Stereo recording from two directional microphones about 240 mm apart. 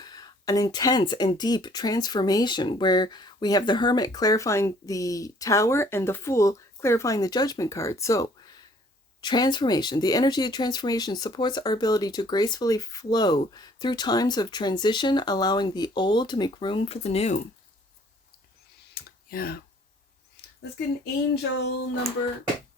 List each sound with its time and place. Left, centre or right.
0.0 s speech: centre
18.9 s clicking: left
20.3 s a sound: left